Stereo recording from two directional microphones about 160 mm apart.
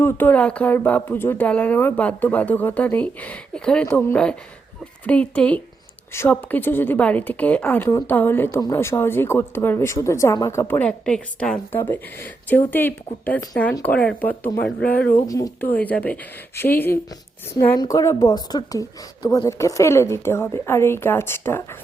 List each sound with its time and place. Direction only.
0.0 s speech: 10° left (ahead or behind)
15.3 s a woman's voice: 20° left (ahead or behind)
15.7 s speech: 10° left (ahead or behind)